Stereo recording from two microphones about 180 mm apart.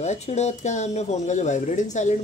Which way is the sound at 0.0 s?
40° left (ahead or behind).